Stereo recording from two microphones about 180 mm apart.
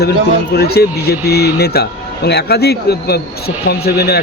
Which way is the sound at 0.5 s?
60° left (ahead or behind).